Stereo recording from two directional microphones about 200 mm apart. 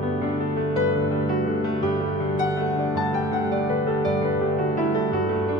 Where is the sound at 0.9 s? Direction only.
15° right (ahead or behind).